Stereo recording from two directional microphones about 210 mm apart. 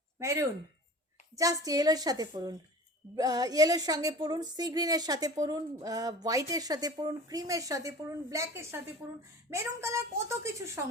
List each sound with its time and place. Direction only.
0.2 s speech: 15° right (ahead or behind)